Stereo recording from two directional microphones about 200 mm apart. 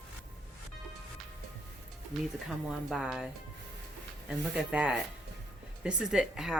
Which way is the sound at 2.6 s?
Centre (ahead or behind).